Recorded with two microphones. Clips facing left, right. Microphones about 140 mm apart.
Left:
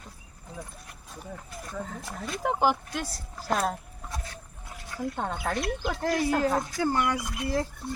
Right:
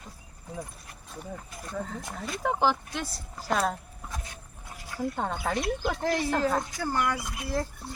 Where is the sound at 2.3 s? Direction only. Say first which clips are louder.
Left 1 dB; 5° left (ahead or behind).